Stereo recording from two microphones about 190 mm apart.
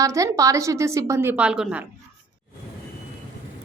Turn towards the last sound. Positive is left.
turn(degrees=-5)  # may be behind; listen again after turning